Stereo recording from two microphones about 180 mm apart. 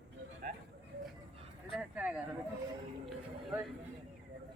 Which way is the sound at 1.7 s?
5° right (ahead or behind).